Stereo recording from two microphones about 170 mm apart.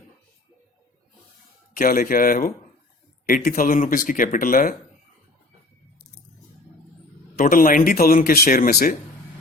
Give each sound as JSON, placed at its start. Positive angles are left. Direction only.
{"t": 1.8, "sound": "speech", "side_deg": 55}
{"t": 7.3, "sound": "speech", "side_deg": 55}